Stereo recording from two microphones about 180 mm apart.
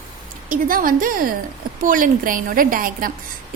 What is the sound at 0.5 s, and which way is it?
A woman's voice, 50° right (ahead or behind).